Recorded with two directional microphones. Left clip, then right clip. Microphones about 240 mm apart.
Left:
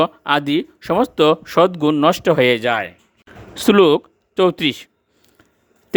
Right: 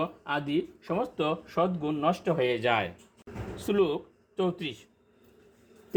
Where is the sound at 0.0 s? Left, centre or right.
Left.